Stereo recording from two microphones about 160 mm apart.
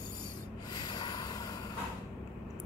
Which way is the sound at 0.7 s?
25° left (ahead or behind).